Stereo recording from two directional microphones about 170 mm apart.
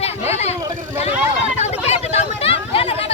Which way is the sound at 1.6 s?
40° left (ahead or behind).